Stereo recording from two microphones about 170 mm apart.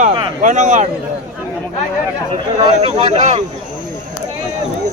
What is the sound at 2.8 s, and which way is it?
Speech, 40° right (ahead or behind).